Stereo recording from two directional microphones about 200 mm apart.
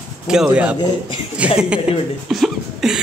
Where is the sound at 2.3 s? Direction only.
Centre (ahead or behind).